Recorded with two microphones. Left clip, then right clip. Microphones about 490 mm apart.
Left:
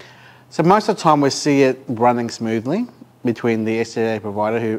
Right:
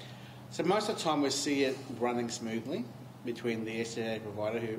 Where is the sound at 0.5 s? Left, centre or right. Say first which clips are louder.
Left 15 dB; left.